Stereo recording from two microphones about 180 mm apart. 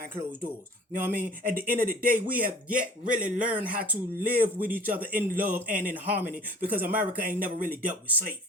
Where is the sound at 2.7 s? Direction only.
50° right (ahead or behind).